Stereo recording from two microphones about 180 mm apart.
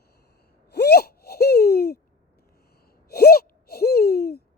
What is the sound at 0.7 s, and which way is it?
Gasp, 65° left (ahead or behind).